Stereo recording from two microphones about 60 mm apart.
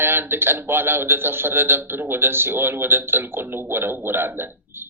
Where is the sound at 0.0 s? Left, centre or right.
Right.